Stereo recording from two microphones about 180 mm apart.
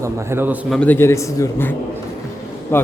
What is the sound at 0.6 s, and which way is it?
A man's voice, 5° left (ahead or behind).